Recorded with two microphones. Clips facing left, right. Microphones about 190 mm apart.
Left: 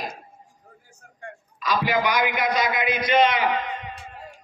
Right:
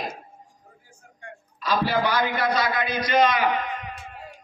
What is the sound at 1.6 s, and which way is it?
A man's voice, 15° left (ahead or behind).